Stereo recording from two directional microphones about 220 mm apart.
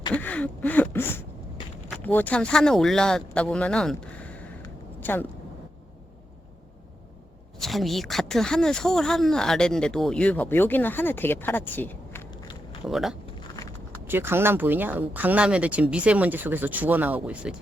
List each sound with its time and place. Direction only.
0.1 s a sound: 5° left (ahead or behind)
2.0 s speech: 5° left (ahead or behind)
7.6 s speech: centre (ahead or behind); by 12.5 s 20° left (ahead or behind)
12.8 s speech: centre (ahead or behind)